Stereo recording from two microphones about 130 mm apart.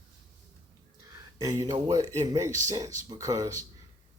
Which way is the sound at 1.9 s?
25° right (ahead or behind).